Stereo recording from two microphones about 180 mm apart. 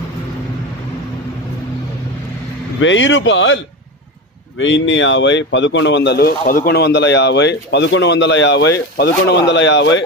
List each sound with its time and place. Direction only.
2.8 s speech: 90° left
4.6 s speech: 90° left; by 9.4 s 65° left (ahead or behind)
9.5 s speech: 85° left